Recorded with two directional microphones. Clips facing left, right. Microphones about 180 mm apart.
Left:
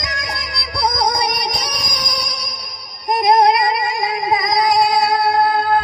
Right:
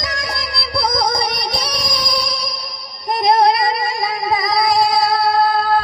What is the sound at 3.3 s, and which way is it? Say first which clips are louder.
Female singing: even; 30° right (ahead or behind).